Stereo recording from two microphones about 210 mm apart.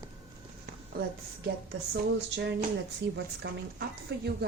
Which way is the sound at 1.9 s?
55° right (ahead or behind).